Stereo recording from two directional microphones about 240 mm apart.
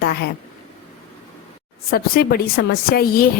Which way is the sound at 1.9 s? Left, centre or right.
Left.